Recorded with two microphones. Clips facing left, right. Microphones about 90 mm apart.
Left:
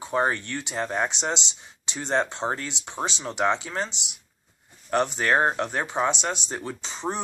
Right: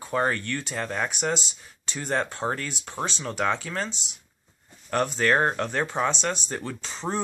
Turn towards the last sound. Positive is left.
turn(degrees=20)  # may be behind; listen again after turning